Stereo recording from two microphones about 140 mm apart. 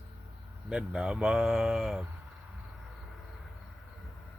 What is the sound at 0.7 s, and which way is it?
Speech, 5° right (ahead or behind).